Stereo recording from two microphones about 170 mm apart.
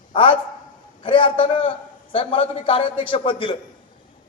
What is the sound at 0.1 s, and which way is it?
A man's voice, 30° left (ahead or behind).